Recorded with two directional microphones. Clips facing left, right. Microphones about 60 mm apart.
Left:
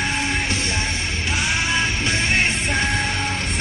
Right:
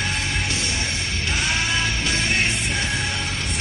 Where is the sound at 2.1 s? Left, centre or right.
Left.